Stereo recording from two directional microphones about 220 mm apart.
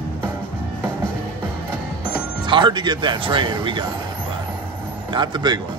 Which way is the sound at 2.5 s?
20° right (ahead or behind).